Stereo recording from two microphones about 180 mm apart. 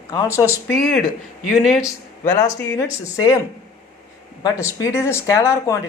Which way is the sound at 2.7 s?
20° left (ahead or behind).